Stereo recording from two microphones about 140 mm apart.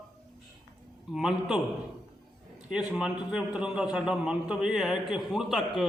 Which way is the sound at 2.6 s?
5° right (ahead or behind).